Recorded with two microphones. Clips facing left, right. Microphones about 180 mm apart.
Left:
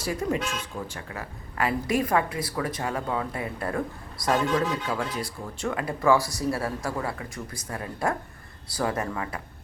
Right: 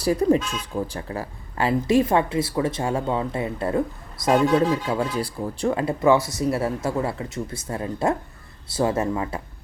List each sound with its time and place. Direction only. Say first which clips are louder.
0.0 s speech: right 8 dB; 35° right (ahead or behind)